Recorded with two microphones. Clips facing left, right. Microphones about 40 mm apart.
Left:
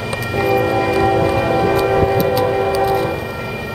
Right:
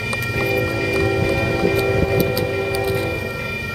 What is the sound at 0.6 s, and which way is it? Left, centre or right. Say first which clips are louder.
Music: left 5 dB; left.